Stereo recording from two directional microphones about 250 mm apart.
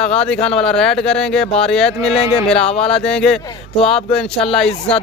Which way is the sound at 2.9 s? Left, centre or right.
Centre.